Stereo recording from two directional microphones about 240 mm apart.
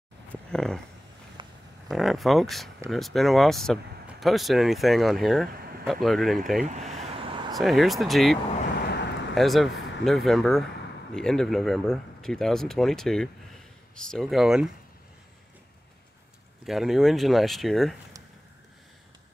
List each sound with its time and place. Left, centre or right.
0.5 s speech: centre
1.9 s speech: centre
6.7 s vehicle: right
7.5 s speech: centre
8.8 s a sound: left
9.3 s speech: centre
16.6 s speech: centre